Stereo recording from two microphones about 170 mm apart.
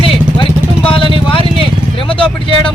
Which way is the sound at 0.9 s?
30° left (ahead or behind).